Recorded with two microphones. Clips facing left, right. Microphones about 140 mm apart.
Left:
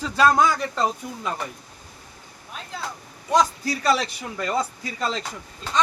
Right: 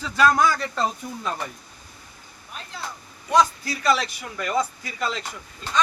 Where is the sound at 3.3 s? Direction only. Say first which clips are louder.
Even; 35° left (ahead or behind).